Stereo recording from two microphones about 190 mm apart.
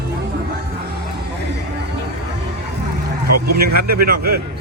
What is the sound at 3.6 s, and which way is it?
Speech, 50° right (ahead or behind).